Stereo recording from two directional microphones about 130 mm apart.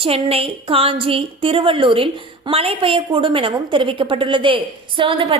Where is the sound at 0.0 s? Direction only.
50° right (ahead or behind).